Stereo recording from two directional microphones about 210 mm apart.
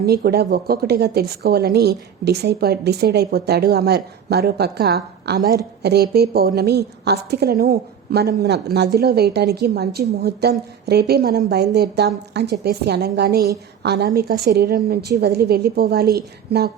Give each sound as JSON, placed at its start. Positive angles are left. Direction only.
{"t": 0.0, "sound": "a woman's voice", "side_deg": -50}